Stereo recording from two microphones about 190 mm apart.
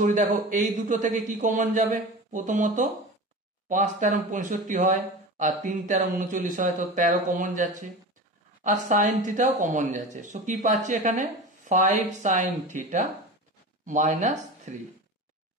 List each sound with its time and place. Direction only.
0.0 s speech: 45° right (ahead or behind)